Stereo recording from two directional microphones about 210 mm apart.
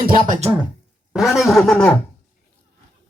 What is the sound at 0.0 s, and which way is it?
Speech, 40° right (ahead or behind).